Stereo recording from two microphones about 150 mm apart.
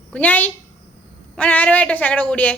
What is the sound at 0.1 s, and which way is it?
Speech, 10° left (ahead or behind).